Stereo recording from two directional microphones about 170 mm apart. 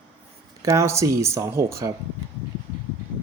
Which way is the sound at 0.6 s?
15° right (ahead or behind).